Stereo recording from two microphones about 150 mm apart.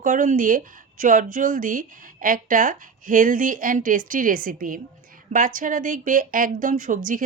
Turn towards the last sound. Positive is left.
turn(degrees=-60)  # may be behind; listen again after turning